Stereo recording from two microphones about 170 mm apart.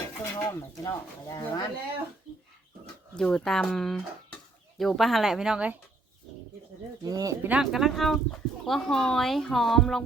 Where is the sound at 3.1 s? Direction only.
5° left (ahead or behind).